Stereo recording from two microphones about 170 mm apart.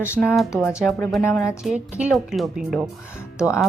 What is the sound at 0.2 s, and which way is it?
A woman's voice, 5° left (ahead or behind).